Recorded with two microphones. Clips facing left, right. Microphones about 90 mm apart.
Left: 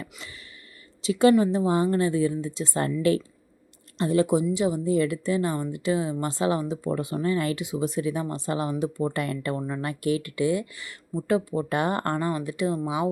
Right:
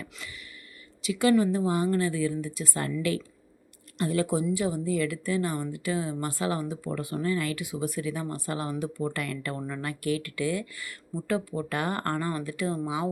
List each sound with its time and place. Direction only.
0.0 s a sound: 30° left (ahead or behind)
1.0 s speech: 30° left (ahead or behind)
3.9 s speech: 25° left (ahead or behind)